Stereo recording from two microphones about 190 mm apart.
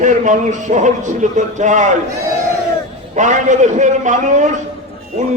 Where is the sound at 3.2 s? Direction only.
40° right (ahead or behind).